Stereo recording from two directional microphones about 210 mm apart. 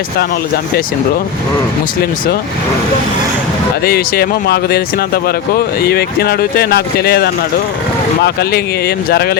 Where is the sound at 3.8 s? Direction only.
45° left (ahead or behind).